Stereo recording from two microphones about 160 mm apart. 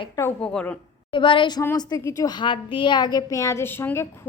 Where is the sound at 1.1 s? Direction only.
30° left (ahead or behind).